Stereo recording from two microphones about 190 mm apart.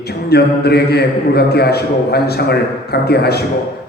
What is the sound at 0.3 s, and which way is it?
A man's voice, 55° left (ahead or behind).